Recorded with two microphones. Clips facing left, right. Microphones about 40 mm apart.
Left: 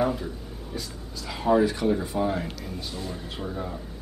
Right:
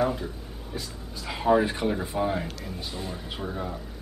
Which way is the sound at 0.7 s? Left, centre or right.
Centre.